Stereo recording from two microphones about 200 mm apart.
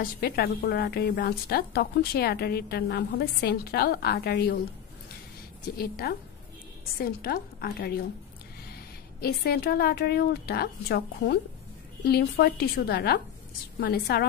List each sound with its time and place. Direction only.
0.0 s a woman's voice: 50° left (ahead or behind)
5.8 s a woman's voice: 50° left (ahead or behind)
9.2 s a woman's voice: 50° left (ahead or behind)